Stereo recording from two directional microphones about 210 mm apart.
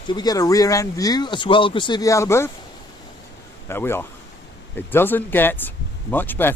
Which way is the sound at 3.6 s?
10° left (ahead or behind).